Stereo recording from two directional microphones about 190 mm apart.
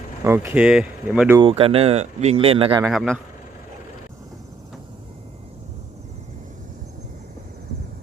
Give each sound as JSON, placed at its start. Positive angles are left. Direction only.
{"t": 0.3, "sound": "speech", "side_deg": -10}
{"t": 1.4, "sound": "speech", "side_deg": -30}
{"t": 2.8, "sound": "speech", "side_deg": 0}